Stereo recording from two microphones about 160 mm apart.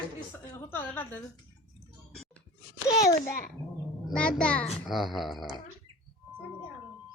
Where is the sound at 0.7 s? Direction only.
10° left (ahead or behind).